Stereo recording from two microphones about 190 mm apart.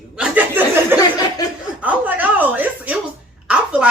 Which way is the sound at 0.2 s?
10° right (ahead or behind).